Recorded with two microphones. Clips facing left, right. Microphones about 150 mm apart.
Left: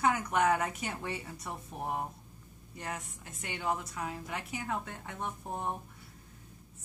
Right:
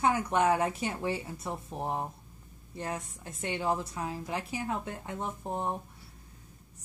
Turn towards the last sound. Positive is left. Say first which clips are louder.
# right 3 dB
turn(degrees=-25)  # may be behind; listen again after turning